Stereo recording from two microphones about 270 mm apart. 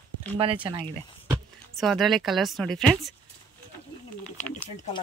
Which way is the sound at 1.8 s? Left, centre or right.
Centre.